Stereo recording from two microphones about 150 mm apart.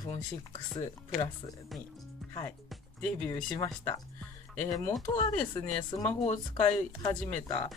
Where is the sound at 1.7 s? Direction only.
Centre (ahead or behind).